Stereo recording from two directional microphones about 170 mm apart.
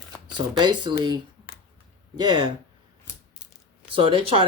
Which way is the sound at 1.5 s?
60° left (ahead or behind).